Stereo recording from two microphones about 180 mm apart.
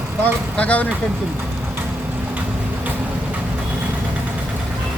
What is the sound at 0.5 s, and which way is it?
Speech, 5° left (ahead or behind).